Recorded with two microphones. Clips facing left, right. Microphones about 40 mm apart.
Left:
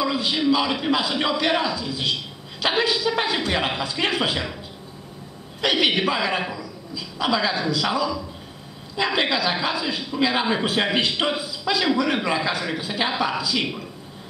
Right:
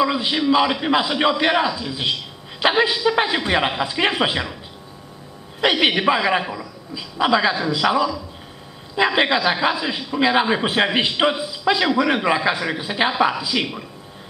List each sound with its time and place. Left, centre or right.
0.0 s a sound: right
0.5 s a man's voice: right
5.6 s a man's voice: right